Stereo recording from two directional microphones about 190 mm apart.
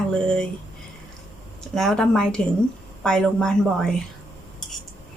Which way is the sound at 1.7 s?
Centre (ahead or behind).